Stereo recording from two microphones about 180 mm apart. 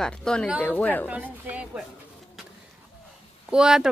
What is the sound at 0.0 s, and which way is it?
Speech, 5° left (ahead or behind).